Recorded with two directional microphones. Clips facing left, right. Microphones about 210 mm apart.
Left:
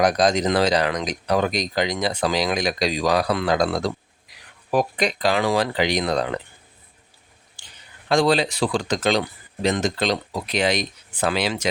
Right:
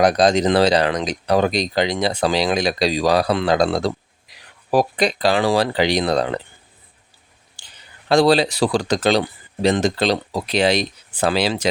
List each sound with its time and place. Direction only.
0.0 s speech: 30° right (ahead or behind)
8.0 s speech: 35° right (ahead or behind)